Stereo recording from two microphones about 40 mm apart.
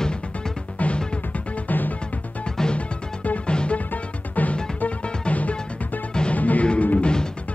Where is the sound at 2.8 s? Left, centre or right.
Left.